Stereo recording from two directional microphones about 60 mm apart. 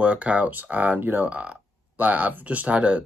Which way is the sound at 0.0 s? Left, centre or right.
Right.